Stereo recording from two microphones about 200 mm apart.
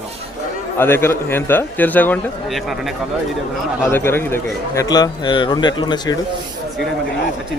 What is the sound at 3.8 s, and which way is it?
A man's voice, 10° left (ahead or behind).